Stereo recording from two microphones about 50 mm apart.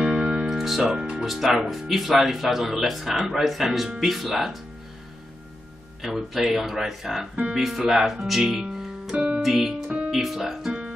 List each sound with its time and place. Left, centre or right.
0.0 s music: right
0.5 s music: centre
0.9 s speech: centre
1.2 s speech: centre
6.0 s speech: centre
9.1 s speech: right
9.4 s speech: centre